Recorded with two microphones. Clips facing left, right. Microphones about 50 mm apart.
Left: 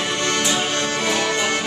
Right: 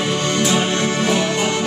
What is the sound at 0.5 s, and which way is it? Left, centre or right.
Music, right.